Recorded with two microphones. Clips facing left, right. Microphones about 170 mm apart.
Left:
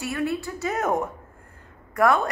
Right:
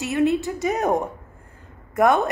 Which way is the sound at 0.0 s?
20° right (ahead or behind).